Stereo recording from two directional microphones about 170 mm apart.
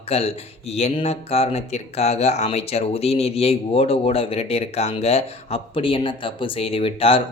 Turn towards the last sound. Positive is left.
turn(degrees=35)  # may be behind; listen again after turning